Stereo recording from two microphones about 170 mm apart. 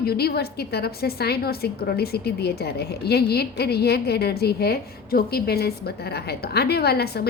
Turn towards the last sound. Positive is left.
turn(degrees=70)  # may be behind; listen again after turning